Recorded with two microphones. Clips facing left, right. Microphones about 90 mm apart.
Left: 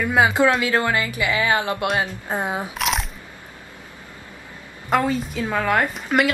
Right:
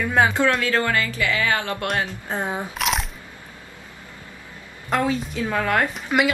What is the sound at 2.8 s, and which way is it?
Biting, centre (ahead or behind).